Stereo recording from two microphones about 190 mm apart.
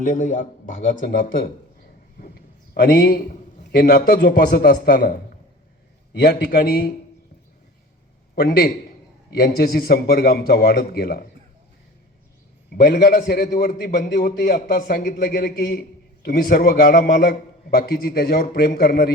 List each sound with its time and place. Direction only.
0.0 s a man's voice: 40° left (ahead or behind)
2.1 s a sound: 50° left (ahead or behind)
3.6 s a man's voice: 55° left (ahead or behind)
6.2 s a man's voice: 60° left (ahead or behind)
8.4 s a man's voice: 55° left (ahead or behind)
12.7 s a man's voice: 60° left (ahead or behind)